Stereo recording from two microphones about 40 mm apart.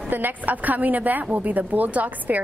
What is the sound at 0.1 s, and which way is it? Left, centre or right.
A woman's voice, right.